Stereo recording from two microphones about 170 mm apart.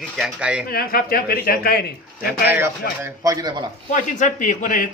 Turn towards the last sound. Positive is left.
turn(degrees=50)  # may be behind; listen again after turning